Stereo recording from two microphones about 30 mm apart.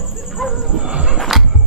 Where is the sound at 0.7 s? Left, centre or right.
Right.